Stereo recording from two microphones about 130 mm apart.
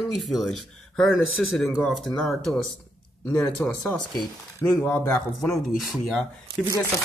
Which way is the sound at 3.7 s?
5° left (ahead or behind).